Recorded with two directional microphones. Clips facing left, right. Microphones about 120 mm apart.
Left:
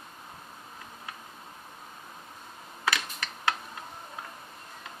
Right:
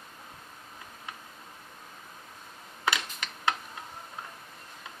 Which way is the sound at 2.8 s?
20° right (ahead or behind).